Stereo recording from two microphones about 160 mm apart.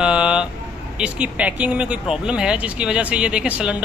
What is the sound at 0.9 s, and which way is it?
Speech, 5° right (ahead or behind).